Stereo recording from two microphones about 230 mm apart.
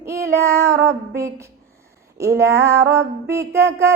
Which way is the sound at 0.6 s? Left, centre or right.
Centre.